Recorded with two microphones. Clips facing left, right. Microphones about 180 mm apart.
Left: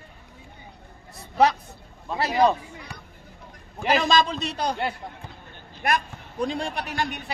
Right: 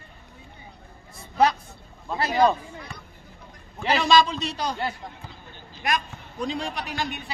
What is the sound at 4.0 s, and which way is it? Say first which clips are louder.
Speech: right 4 dB; 50° left (ahead or behind).